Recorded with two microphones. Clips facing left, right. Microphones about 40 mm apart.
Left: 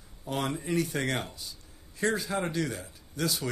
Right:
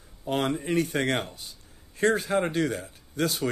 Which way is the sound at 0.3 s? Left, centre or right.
Right.